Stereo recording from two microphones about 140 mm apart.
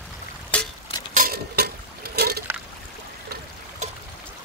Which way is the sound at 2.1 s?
90° right.